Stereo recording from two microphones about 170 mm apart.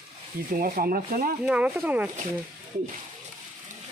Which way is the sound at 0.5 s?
55° right (ahead or behind).